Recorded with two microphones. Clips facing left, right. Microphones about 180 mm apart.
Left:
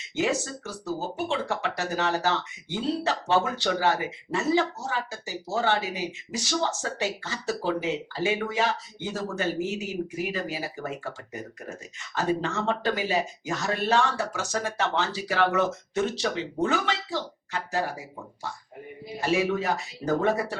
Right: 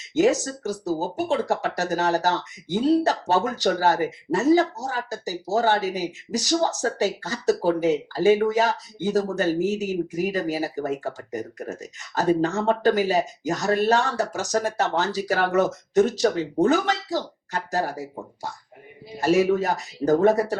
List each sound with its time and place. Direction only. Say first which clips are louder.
0.1 s speech: right 7 dB; 40° right (ahead or behind)
19.2 s speech: right 6 dB; 40° right (ahead or behind)